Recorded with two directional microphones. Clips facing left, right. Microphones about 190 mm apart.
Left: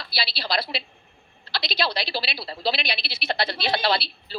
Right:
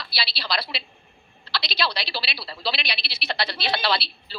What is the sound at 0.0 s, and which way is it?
A woman's voice, 45° left (ahead or behind).